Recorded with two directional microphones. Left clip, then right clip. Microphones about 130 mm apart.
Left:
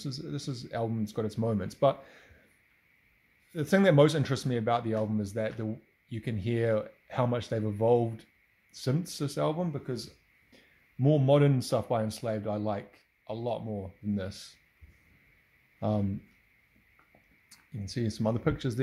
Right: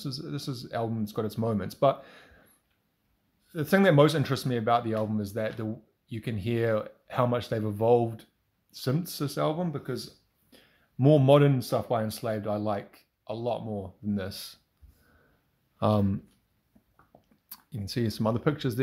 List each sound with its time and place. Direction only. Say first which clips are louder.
0.0 s speech: right 2 dB; 5° left (ahead or behind)
3.5 s speech: right 2 dB; 5° left (ahead or behind)
11.0 s speech: right 5 dB; 20° right (ahead or behind)
11.5 s speech: right 1 dB; 10° left (ahead or behind)
15.8 s speech: right 6 dB; 25° right (ahead or behind)
17.5 s speech: right 4 dB; 10° right (ahead or behind)